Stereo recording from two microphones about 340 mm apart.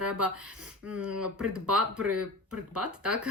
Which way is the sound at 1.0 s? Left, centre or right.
Right.